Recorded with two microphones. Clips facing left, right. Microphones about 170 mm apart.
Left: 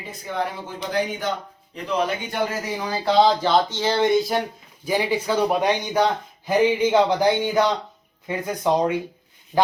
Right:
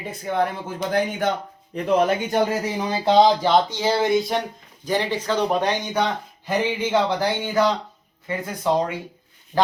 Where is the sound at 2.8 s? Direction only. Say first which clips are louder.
Right 1 dB; 20° right (ahead or behind).